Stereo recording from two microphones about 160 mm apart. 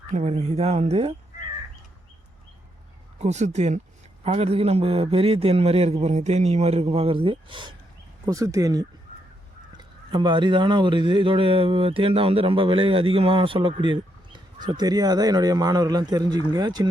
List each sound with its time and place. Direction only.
0.1 s speech: 45° right (ahead or behind)
3.2 s speech: 45° right (ahead or behind)
8.3 s a man's voice: 20° right (ahead or behind)